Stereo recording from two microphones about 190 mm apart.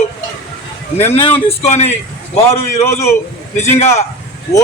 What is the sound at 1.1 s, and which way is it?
Speech, 30° left (ahead or behind).